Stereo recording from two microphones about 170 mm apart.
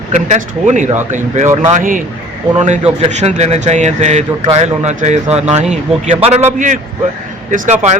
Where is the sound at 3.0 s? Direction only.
40° right (ahead or behind).